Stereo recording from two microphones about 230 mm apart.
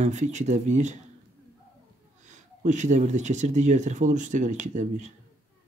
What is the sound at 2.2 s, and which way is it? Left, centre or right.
Speech, right.